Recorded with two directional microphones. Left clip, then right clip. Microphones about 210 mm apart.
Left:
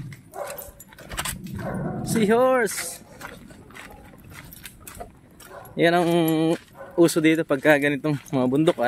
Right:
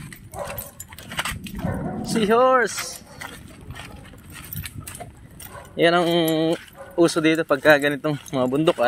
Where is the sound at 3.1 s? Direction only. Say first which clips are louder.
Right 3 dB; 50° right (ahead or behind).